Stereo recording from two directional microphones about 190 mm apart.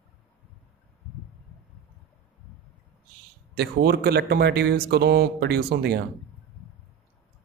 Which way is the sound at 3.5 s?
55° right (ahead or behind).